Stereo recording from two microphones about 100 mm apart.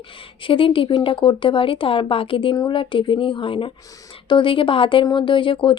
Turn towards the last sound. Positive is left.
turn(degrees=55)  # may be behind; listen again after turning